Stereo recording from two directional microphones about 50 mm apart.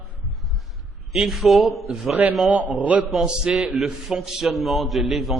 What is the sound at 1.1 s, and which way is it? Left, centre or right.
Speech, centre.